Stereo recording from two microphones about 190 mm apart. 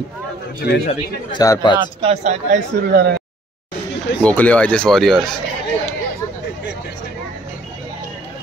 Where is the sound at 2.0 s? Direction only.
35° right (ahead or behind).